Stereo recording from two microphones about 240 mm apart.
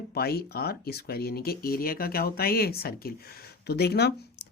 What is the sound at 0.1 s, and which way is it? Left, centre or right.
A man's voice, left.